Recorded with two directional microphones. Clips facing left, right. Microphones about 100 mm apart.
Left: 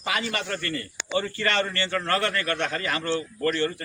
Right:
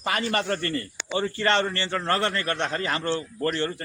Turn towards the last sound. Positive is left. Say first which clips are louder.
# left 1 dB
turn(degrees=-30)  # may be behind; listen again after turning